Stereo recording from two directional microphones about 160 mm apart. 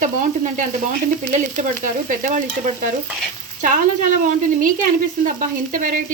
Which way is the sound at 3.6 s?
55° right (ahead or behind).